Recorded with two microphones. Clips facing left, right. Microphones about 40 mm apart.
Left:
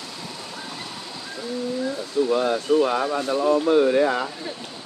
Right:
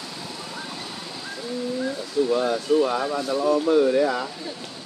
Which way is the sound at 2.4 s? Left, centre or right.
Left.